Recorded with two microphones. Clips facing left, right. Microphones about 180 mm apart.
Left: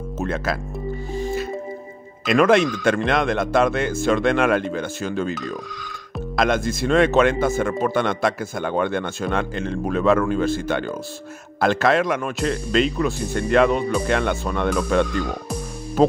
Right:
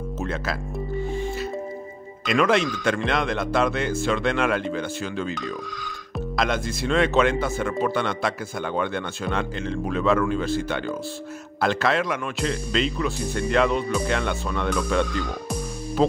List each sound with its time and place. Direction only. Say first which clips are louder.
0.2 s speech: left 5 dB; 50° left (ahead or behind)
2.3 s speech: left 5 dB; 50° left (ahead or behind)
6.3 s speech: left 5 dB; 50° left (ahead or behind)
16.0 s speech: left 4 dB; 45° left (ahead or behind)